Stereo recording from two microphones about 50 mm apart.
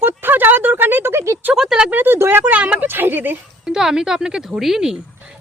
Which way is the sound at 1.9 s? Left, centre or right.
Right.